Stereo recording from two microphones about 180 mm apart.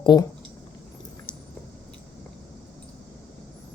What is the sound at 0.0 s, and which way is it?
Speech, 25° left (ahead or behind).